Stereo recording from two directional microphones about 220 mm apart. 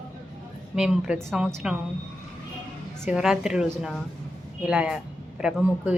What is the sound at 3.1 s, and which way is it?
Speech, 5° right (ahead or behind).